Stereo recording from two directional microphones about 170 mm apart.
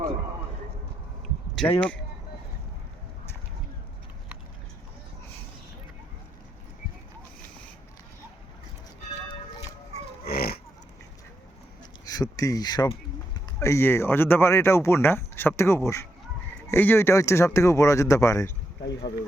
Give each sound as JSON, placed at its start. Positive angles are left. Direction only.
{"t": 1.6, "sound": "speech", "side_deg": 0}
{"t": 10.2, "sound": "livestock", "side_deg": 65}
{"t": 12.0, "sound": "speech", "side_deg": 20}
{"t": 18.8, "sound": "speech", "side_deg": 90}